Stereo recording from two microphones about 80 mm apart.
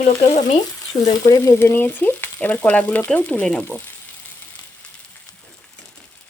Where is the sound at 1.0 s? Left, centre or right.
Left.